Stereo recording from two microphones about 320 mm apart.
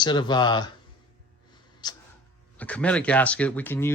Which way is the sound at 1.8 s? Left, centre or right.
Centre.